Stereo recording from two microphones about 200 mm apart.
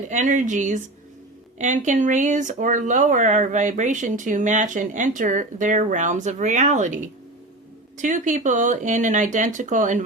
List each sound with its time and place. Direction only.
0.1 s speech: 40° right (ahead or behind)